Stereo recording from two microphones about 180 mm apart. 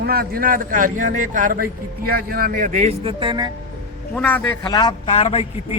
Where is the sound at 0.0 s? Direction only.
60° right (ahead or behind).